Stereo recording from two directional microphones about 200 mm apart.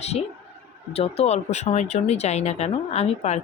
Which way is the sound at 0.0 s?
30° left (ahead or behind).